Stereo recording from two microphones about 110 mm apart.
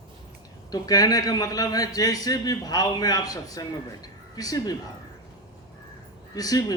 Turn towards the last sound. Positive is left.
turn(degrees=35)  # may be behind; listen again after turning